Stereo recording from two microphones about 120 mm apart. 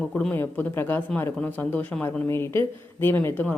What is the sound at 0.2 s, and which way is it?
Speech, 10° left (ahead or behind).